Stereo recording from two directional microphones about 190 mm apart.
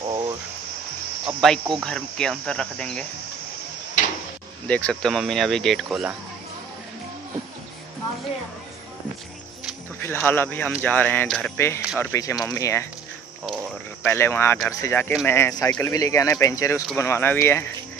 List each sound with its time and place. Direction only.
1.2 s speech: centre (ahead or behind)
4.6 s speech: 5° left (ahead or behind)
9.9 s speech: 10° left (ahead or behind)
11.5 s speech: 15° left (ahead or behind)
14.0 s speech: 10° left (ahead or behind)